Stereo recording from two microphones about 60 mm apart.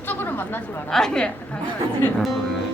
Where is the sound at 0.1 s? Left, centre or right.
Left.